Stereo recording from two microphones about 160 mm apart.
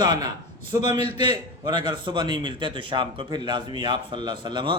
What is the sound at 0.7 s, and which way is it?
A man's voice, 20° right (ahead or behind).